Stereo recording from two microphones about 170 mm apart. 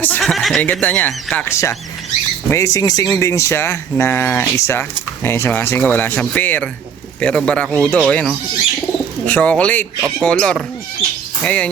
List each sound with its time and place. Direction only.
0.0 s speech: 10° left (ahead or behind)